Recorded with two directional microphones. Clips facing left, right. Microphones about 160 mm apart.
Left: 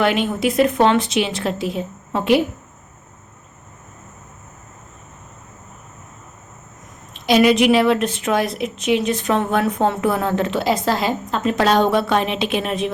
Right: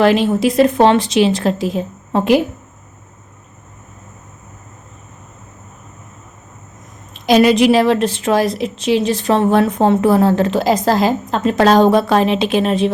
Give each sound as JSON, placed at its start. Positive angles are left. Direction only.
{"t": 0.0, "sound": "a woman's voice", "side_deg": -35}
{"t": 7.1, "sound": "a woman's voice", "side_deg": -40}